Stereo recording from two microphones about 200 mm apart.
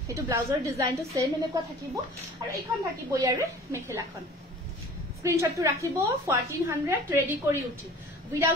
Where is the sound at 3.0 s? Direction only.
15° right (ahead or behind).